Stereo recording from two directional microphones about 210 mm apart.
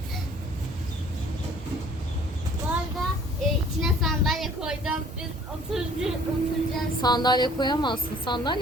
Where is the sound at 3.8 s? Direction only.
Centre (ahead or behind).